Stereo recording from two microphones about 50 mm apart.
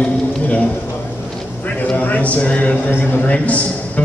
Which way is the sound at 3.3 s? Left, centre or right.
Left.